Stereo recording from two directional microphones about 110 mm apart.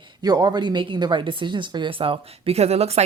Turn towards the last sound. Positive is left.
turn(degrees=-70)  # may be behind; listen again after turning